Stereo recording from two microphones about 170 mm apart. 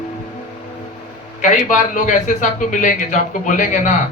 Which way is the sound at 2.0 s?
50° left (ahead or behind).